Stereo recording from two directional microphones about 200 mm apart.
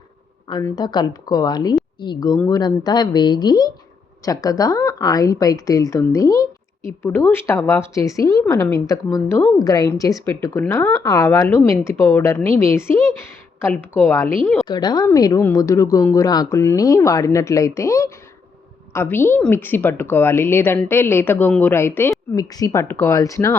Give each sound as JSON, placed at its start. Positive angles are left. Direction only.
{"t": 0.4, "sound": "speech", "side_deg": 20}